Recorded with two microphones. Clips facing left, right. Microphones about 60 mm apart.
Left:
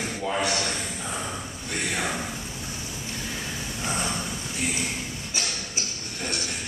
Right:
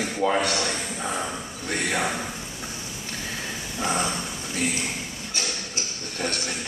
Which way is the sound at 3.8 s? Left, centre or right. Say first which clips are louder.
Right 5 dB; right.